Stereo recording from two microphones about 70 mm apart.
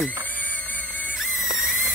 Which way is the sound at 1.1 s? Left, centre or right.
Centre.